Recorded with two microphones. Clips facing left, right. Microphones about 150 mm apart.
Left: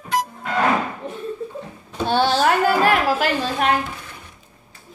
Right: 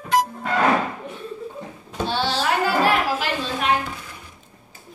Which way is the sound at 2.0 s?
50° left (ahead or behind).